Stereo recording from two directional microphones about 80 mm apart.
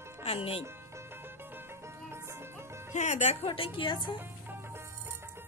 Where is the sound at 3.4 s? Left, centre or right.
Left.